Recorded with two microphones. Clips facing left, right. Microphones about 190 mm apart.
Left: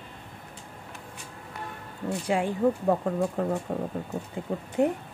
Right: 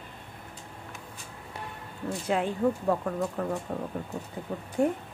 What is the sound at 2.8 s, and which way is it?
Speech, 30° left (ahead or behind).